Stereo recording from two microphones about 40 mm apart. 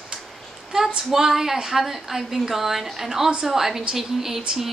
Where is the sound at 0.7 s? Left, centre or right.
Centre.